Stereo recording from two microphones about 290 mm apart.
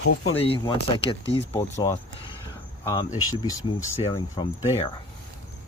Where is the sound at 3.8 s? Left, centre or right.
Centre.